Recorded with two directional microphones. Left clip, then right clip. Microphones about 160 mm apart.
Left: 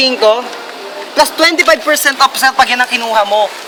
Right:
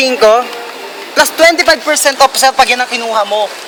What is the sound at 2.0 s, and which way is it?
Speech, 25° right (ahead or behind).